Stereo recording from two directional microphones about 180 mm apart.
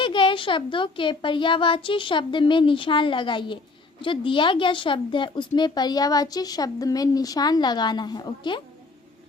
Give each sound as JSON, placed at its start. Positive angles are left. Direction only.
{"t": 0.0, "sound": "speech", "side_deg": 25}